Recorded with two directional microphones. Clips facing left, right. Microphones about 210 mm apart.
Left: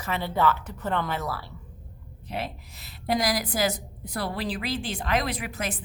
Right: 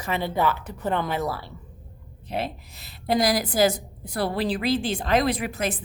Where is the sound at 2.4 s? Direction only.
30° right (ahead or behind).